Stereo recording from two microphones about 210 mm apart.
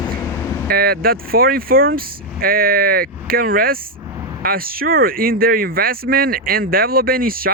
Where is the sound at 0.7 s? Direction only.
45° right (ahead or behind).